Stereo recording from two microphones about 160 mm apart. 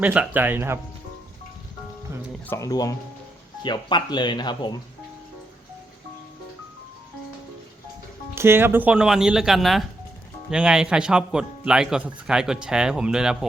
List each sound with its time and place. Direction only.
0.0 s speech: 10° right (ahead or behind)
2.5 s speech: 20° left (ahead or behind)
8.4 s a man's voice: 15° right (ahead or behind)